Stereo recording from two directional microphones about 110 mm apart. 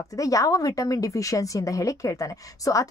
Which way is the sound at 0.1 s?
30° left (ahead or behind).